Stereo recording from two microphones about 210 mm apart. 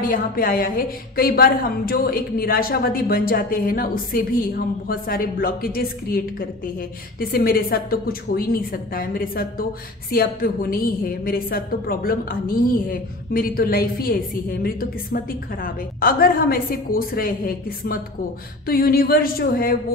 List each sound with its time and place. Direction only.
0.0 s a woman's voice: 40° left (ahead or behind)